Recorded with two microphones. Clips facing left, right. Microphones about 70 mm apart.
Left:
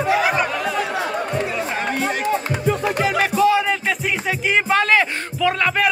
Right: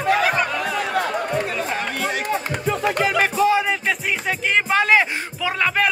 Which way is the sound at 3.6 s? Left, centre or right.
Centre.